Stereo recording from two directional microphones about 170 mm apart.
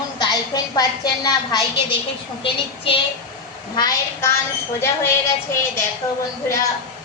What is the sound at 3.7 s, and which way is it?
Speech, 20° left (ahead or behind).